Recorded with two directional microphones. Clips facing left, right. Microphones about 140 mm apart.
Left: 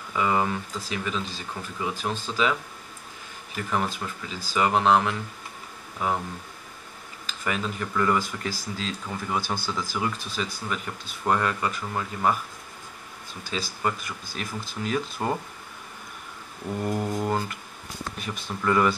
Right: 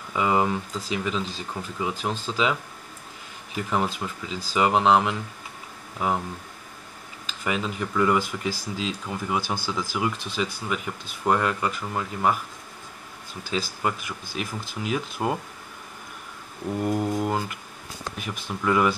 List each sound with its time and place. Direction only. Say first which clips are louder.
0.1 s speech: right 2 dB; 15° right (ahead or behind)
3.7 s speech: right 2 dB; 15° right (ahead or behind)
7.2 s speech: right 2 dB; 20° right (ahead or behind)
13.5 s speech: right 2 dB; 10° right (ahead or behind)
16.8 s speech: right 2 dB; 5° right (ahead or behind)